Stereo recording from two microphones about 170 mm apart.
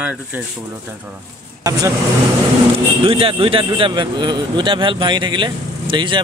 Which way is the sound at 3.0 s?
30° right (ahead or behind).